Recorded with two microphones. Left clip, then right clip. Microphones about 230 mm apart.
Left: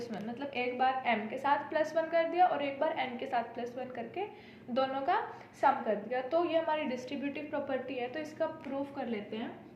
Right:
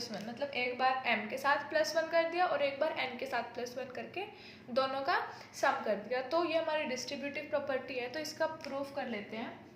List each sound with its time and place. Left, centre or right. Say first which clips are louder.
0.0 s a woman's voice: even; right